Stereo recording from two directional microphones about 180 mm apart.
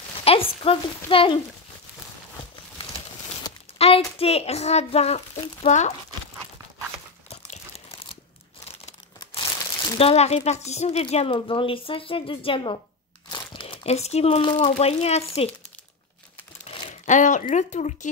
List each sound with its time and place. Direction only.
0.2 s speech: 30° left (ahead or behind)
3.7 s a sound: 35° left (ahead or behind)
4.2 s speech: 35° left (ahead or behind)
7.2 s crumpling: 35° left (ahead or behind)
9.3 s crumpling: 20° left (ahead or behind)
9.9 s speech: 35° left (ahead or behind)
16.7 s a sound: 35° left (ahead or behind)
17.0 s speech: 45° left (ahead or behind)